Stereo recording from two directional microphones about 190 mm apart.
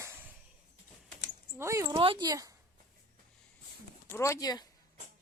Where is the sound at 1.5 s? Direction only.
15° right (ahead or behind).